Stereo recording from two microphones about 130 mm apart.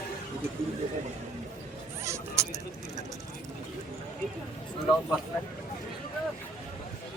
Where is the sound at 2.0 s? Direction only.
20° right (ahead or behind).